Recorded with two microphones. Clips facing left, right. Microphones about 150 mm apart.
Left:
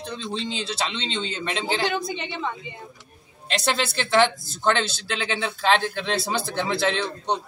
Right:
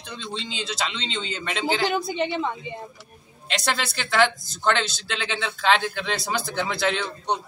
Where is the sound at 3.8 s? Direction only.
30° left (ahead or behind).